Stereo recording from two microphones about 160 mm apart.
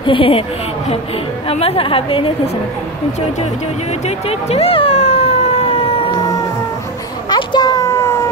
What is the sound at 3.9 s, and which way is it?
Emergency vehicle, 45° left (ahead or behind).